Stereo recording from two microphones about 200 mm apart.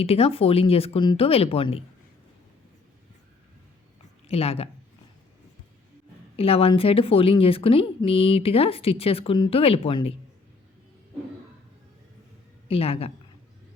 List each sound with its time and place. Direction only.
0.0 s a woman's voice: 30° left (ahead or behind)
4.3 s a woman's voice: 30° left (ahead or behind)
6.3 s a woman's voice: 30° left (ahead or behind)
12.6 s a woman's voice: 30° left (ahead or behind)